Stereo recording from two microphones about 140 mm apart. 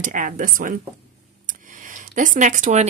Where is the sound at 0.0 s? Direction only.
70° right (ahead or behind).